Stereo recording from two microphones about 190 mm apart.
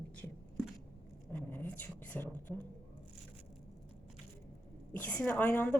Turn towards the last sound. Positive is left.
turn(degrees=10)  # may be behind; listen again after turning